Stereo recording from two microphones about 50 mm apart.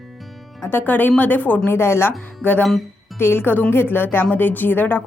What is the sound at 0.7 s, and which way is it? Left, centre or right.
Speech, left.